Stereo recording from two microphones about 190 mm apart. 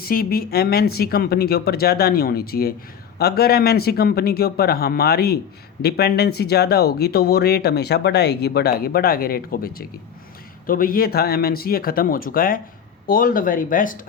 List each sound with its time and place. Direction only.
0.0 s speech: 50° left (ahead or behind)